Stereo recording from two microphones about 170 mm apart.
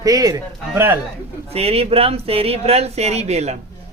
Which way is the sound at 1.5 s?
35° right (ahead or behind).